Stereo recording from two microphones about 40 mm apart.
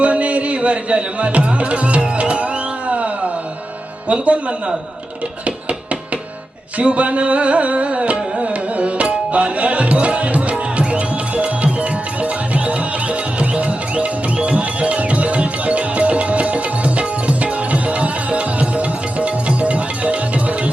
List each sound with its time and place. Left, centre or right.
0.0 s music: right
4.1 s a man's voice: right
5.5 s a sound: right
6.7 s music: right